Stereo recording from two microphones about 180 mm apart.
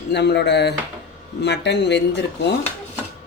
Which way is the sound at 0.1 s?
70° left (ahead or behind).